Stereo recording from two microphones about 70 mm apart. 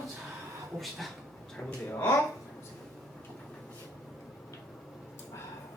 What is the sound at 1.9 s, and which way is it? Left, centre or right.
Speech, left.